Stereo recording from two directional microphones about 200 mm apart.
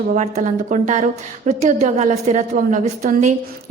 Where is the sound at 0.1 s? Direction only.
35° right (ahead or behind).